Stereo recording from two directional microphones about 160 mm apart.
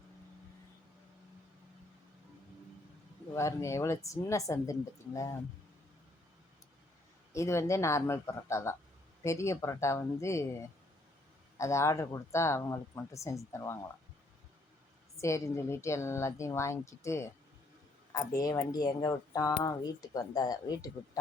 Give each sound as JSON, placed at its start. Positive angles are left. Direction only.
{"t": 3.3, "sound": "speech", "side_deg": 20}
{"t": 7.3, "sound": "speech", "side_deg": 20}
{"t": 15.2, "sound": "speech", "side_deg": 15}
{"t": 18.3, "sound": "speech", "side_deg": 20}